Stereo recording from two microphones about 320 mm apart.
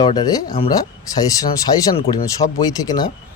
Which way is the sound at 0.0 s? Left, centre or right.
Centre.